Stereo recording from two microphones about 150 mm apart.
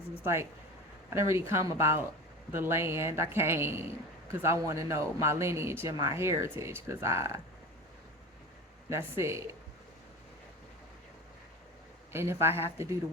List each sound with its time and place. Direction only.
0.2 s a woman's voice: 15° right (ahead or behind)
8.9 s a woman's voice: 15° right (ahead or behind)
12.1 s a woman's voice: 15° right (ahead or behind)